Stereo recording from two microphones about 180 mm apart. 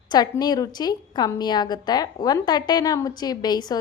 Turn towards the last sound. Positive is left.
turn(degrees=20)  # may be behind; listen again after turning